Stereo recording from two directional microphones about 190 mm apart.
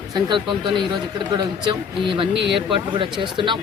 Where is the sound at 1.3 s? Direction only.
25° right (ahead or behind).